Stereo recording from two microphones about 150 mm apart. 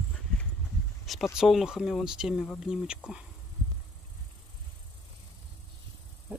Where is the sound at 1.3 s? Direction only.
Centre (ahead or behind).